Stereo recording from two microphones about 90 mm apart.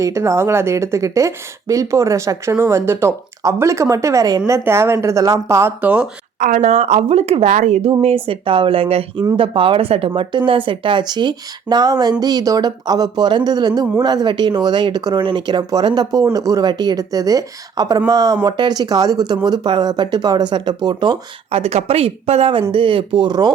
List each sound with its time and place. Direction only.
0.0 s a woman's voice: 35° right (ahead or behind)
4.5 s a woman's voice: 30° right (ahead or behind)
5.8 s speech: 15° right (ahead or behind)
7.1 s speech: 90° right
9.3 s speech: 80° right
10.2 s speech: 70° right (ahead or behind)
21.5 s speech: 90° right
22.7 s speech: 70° right (ahead or behind); by 23.5 s 55° right (ahead or behind)